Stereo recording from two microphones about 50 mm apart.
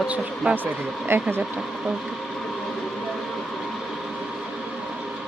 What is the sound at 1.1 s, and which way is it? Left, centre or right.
Speech, right.